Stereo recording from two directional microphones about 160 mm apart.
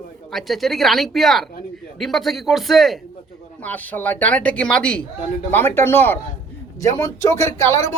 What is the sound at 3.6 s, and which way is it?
Speech, 10° left (ahead or behind).